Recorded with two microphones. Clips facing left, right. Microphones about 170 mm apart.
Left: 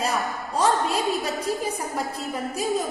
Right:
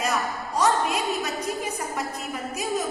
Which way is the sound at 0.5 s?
30° left (ahead or behind).